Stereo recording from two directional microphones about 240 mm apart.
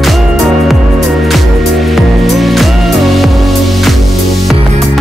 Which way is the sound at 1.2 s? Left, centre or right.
Centre.